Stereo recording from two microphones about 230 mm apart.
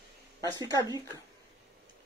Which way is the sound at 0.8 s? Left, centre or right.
Centre.